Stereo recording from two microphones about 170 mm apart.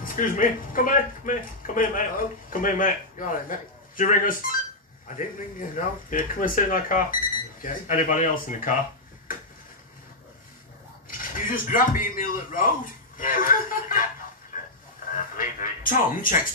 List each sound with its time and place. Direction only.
0.0 s speech: 55° left (ahead or behind)
11.1 s speech: 55° left (ahead or behind)
14.5 s a sound: 50° left (ahead or behind)
15.3 s speech: 55° left (ahead or behind)